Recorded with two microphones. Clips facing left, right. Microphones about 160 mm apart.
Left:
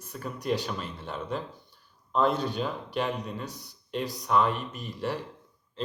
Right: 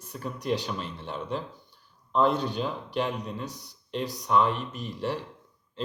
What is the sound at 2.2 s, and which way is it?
Speech, 5° left (ahead or behind).